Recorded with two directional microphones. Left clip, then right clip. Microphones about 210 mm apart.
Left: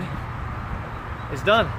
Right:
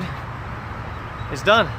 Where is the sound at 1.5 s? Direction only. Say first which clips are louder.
Right 3 dB; 25° right (ahead or behind).